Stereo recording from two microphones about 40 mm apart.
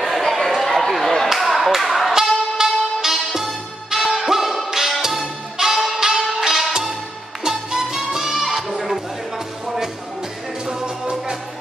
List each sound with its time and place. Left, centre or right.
0.0 s a sound: centre
1.3 s clapping: centre
2.5 s music: centre
10.7 s music: centre